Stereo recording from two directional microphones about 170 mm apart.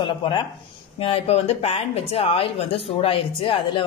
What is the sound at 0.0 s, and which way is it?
Speech, 30° left (ahead or behind).